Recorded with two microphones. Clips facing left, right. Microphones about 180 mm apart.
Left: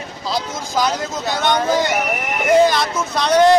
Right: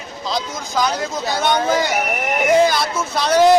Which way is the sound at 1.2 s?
Centre (ahead or behind).